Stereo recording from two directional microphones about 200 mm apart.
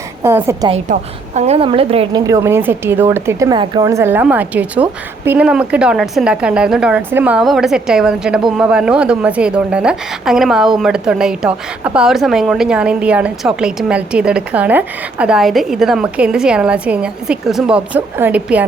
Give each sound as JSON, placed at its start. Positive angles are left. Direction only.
{"t": 0.2, "sound": "a woman's voice", "side_deg": -15}
{"t": 0.7, "sound": "a woman's voice", "side_deg": -35}
{"t": 2.2, "sound": "a woman's voice", "side_deg": -15}